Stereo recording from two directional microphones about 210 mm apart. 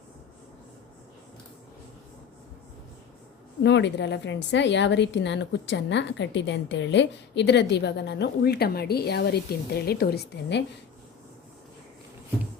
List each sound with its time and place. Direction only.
3.6 s a woman's voice: 55° left (ahead or behind)